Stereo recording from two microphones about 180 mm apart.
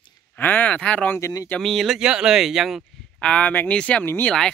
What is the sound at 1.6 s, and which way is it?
Speech, centre (ahead or behind).